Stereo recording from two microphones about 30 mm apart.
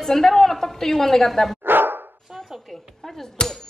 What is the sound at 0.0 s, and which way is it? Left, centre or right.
Speech, centre.